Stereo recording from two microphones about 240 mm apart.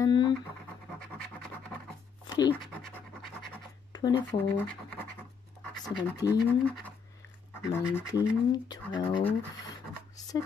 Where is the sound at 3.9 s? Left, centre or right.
Centre.